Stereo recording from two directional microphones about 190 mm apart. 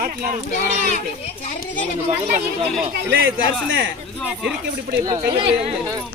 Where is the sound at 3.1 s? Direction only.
80° right.